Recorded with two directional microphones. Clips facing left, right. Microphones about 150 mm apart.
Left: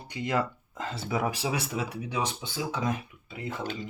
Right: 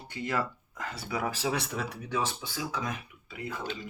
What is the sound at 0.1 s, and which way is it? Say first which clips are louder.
Speech: left 3 dB; 15° left (ahead or behind).